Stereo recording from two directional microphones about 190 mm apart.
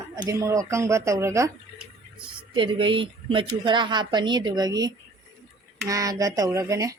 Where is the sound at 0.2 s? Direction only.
20° right (ahead or behind).